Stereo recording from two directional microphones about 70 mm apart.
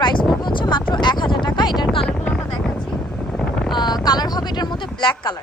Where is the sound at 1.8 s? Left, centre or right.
Centre.